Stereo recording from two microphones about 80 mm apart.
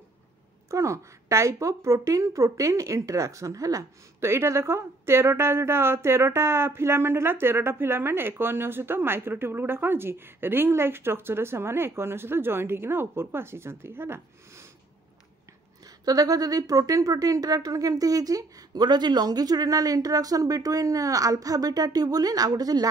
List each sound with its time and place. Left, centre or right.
0.7 s a woman's voice: right
4.3 s a woman's voice: right
16.1 s speech: right